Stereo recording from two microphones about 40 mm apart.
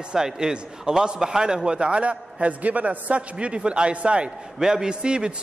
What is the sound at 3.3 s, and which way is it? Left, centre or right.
Speech, right.